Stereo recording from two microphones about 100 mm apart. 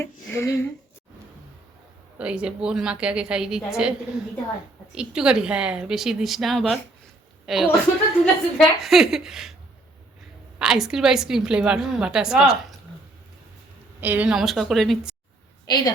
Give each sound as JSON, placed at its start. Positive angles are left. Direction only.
{"t": 0.0, "sound": "speech", "side_deg": 25}
{"t": 2.1, "sound": "a woman's voice", "side_deg": -10}
{"t": 10.6, "sound": "a woman's voice", "side_deg": -5}
{"t": 14.0, "sound": "a woman's voice", "side_deg": -20}
{"t": 14.3, "sound": "a woman's voice", "side_deg": 0}
{"t": 15.6, "sound": "a woman's voice", "side_deg": 45}